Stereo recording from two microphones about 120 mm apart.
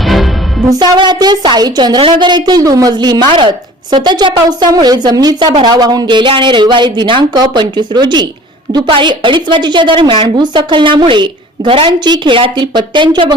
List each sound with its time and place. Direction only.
0.0 s music: centre (ahead or behind)
0.7 s a woman's voice: 35° right (ahead or behind)